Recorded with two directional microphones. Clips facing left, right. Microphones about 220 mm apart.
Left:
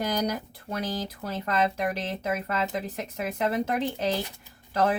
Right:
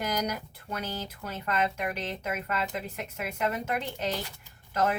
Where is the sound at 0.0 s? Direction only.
30° left (ahead or behind).